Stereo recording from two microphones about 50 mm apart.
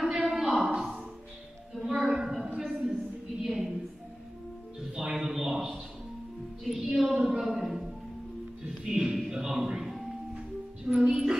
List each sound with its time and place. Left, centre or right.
0.0 s a sound: centre
1.8 s music: centre
2.4 s a sound: centre
3.4 s a man's voice: centre
4.9 s a man's voice: centre
6.6 s music: centre
7.0 s a woman's voice: centre
8.8 s a sound: centre
9.3 s music: centre
10.9 s music: right